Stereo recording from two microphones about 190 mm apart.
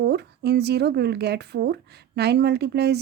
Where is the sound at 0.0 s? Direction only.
60° right (ahead or behind).